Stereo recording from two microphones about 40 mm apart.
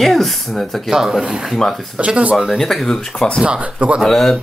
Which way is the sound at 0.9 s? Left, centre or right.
Centre.